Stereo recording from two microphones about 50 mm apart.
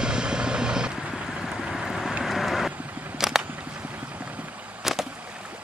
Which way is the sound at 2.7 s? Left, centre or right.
Right.